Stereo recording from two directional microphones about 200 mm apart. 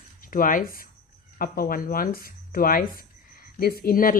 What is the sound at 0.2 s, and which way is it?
Speech, 45° left (ahead or behind).